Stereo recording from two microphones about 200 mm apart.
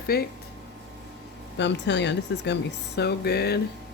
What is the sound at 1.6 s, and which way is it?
Speech, 60° left (ahead or behind).